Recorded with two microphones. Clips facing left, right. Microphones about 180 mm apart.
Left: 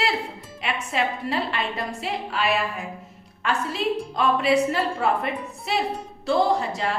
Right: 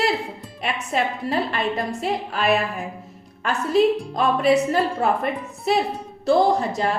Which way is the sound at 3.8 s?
45° right (ahead or behind).